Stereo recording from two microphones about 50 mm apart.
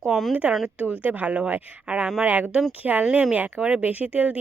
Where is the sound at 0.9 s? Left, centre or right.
Right.